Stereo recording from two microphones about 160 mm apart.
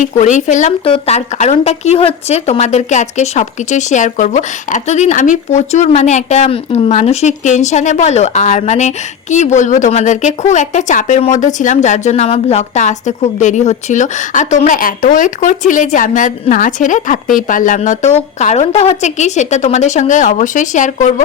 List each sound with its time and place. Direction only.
0.0 s a woman's voice: 50° left (ahead or behind)
0.9 s a woman's voice: 40° left (ahead or behind)